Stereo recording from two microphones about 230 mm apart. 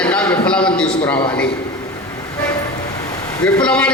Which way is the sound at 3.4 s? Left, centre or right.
Centre.